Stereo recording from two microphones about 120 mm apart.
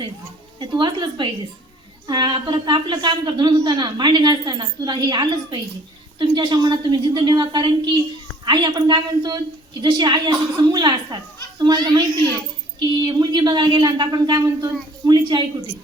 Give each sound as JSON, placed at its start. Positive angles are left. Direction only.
{"t": 0.6, "sound": "a woman's voice", "side_deg": -40}